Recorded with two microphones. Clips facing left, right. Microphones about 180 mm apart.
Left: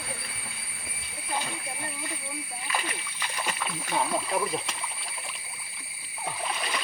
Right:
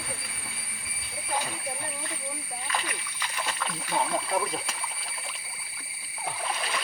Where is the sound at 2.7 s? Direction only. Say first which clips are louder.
Left 1 dB; 15° left (ahead or behind).